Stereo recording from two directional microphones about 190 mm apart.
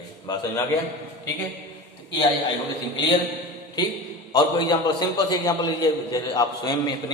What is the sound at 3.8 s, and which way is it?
A man's voice, 20° left (ahead or behind).